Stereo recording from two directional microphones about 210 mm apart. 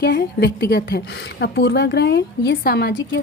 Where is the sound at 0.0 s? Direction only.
50° left (ahead or behind).